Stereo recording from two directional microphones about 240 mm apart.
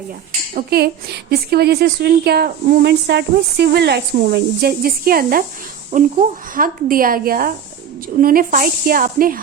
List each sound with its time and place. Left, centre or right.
0.5 s speech: right